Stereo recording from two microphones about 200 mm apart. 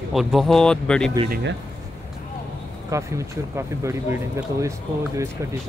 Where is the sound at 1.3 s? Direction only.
60° right (ahead or behind).